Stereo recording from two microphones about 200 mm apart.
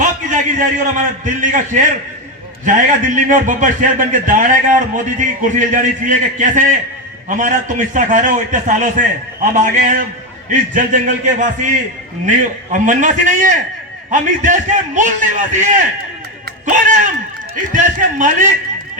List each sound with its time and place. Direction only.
0.0 s a man's voice: 40° right (ahead or behind)